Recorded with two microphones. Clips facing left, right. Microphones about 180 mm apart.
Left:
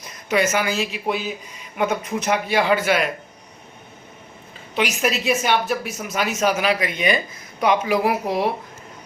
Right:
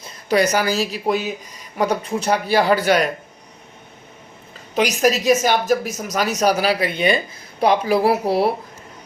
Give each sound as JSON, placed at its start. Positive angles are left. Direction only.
{"t": 0.0, "sound": "speech", "side_deg": -35}
{"t": 4.7, "sound": "speech", "side_deg": -40}